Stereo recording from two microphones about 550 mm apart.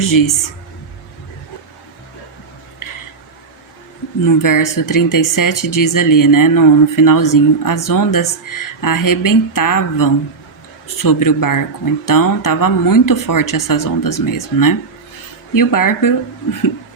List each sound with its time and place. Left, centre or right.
0.0 s speech: left
4.3 s speech: left